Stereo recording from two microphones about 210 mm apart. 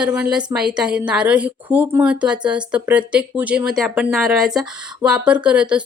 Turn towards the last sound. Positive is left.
turn(degrees=-5)  # may be behind; listen again after turning